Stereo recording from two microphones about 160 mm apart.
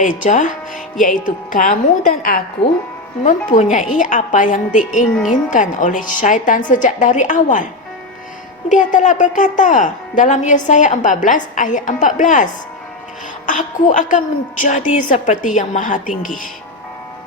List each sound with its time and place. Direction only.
0.0 s a woman's voice: 55° left (ahead or behind)
3.2 s a woman's voice: 50° left (ahead or behind)
8.7 s a woman's voice: 50° left (ahead or behind)
13.5 s a woman's voice: 50° left (ahead or behind)